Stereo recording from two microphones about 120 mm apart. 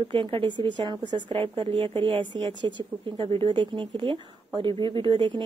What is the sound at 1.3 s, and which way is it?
Speech, 55° right (ahead or behind).